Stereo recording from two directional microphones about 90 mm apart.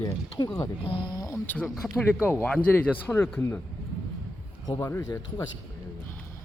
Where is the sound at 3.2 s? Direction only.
25° left (ahead or behind).